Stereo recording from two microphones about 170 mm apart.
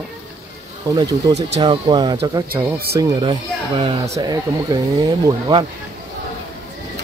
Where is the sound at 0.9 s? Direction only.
20° right (ahead or behind).